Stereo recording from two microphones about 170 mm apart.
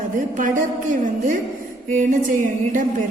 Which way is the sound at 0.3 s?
50° right (ahead or behind).